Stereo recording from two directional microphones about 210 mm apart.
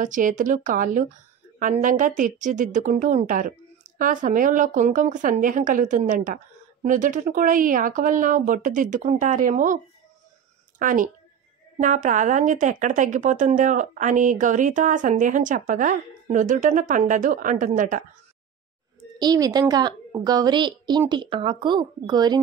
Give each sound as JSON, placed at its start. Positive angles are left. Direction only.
{"t": 0.0, "sound": "a woman's voice", "side_deg": -35}
{"t": 10.8, "sound": "a woman's voice", "side_deg": -40}
{"t": 19.1, "sound": "a woman's voice", "side_deg": -20}